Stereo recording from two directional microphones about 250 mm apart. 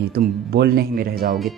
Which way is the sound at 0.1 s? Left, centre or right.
Right.